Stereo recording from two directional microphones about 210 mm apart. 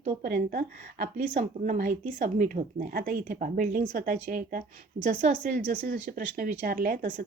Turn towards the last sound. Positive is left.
turn(degrees=-40)  # may be behind; listen again after turning